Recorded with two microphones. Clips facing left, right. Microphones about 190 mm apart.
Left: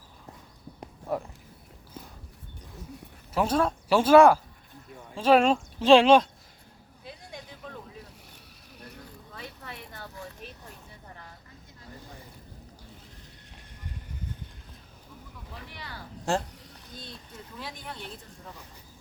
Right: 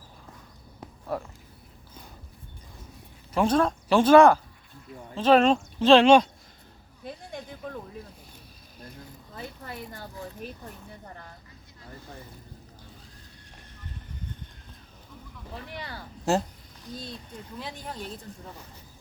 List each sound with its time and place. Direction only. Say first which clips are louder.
0.8 s clip-clop: left 1 dB; 15° left (ahead or behind)
3.3 s speech: right 2 dB; 5° left (ahead or behind)
7.0 s a sound: right 5 dB; 50° right (ahead or behind)
9.3 s a sound: right 5 dB; 40° right (ahead or behind)
16.3 s speech: right 3 dB; 5° right (ahead or behind)
17.8 s speech: right 3 dB; 35° right (ahead or behind)